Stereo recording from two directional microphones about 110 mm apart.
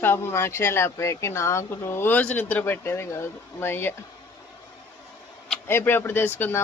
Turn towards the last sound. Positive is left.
turn(degrees=20)  # may be behind; listen again after turning